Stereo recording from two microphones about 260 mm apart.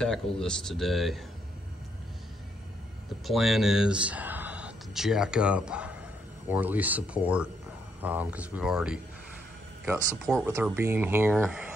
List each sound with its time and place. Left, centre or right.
0.0 s speech: centre
3.3 s speech: centre
10.3 s speech: centre